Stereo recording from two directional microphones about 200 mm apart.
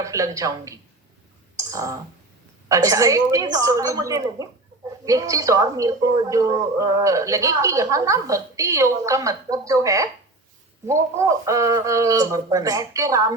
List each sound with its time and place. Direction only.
0.0 s speech: 15° right (ahead or behind)
1.5 s clicking: 15° right (ahead or behind)
2.6 s speech: 15° right (ahead or behind)